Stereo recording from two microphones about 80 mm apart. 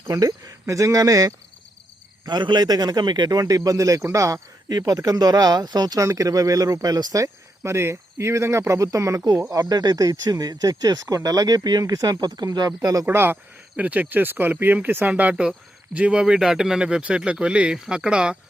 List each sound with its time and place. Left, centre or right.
0.1 s a man's voice: right
2.2 s a man's voice: right
9.5 s a man's voice: right
13.1 s a man's voice: right; by 18.3 s centre